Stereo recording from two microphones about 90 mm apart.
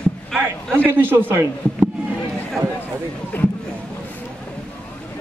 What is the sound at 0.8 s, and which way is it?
Speech, 20° right (ahead or behind).